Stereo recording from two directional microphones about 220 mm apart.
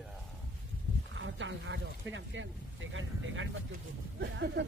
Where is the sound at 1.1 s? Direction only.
60° right (ahead or behind).